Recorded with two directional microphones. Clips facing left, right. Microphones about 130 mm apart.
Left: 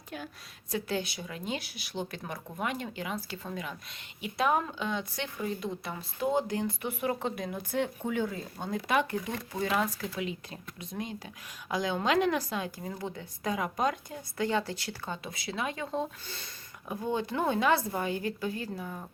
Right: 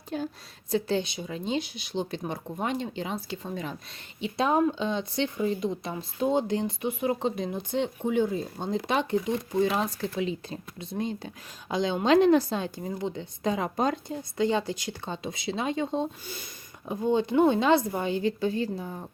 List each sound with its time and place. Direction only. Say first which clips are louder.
0.1 s speech: right 9 dB; 30° right (ahead or behind)
16.2 s speech: right 4 dB; 10° right (ahead or behind)
16.9 s speech: right 7 dB; 20° right (ahead or behind)